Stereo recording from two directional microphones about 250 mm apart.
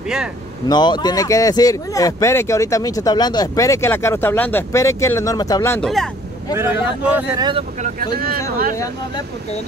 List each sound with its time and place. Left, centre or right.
0.7 s speech: centre
6.5 s speech: centre
7.8 s speech: right
8.7 s speech: centre